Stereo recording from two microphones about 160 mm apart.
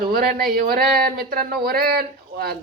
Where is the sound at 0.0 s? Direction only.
65° right (ahead or behind).